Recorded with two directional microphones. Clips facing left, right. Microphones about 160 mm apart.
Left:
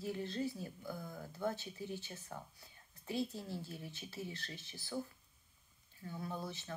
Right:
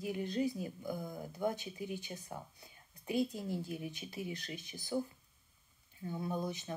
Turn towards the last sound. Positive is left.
turn(degrees=-15)  # may be behind; listen again after turning